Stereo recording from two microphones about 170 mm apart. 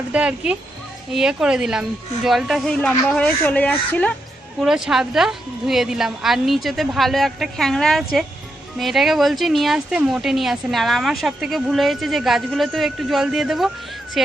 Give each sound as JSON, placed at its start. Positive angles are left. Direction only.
{"t": 0.1, "sound": "a woman's voice", "side_deg": -5}
{"t": 4.6, "sound": "a woman's voice", "side_deg": -5}